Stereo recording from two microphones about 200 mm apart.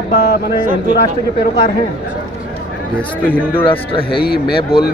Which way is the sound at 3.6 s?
25° left (ahead or behind).